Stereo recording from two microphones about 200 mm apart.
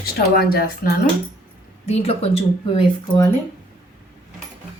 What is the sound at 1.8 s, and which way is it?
Speech, 30° left (ahead or behind).